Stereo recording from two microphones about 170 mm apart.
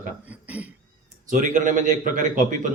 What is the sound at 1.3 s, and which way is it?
Speech, 50° right (ahead or behind).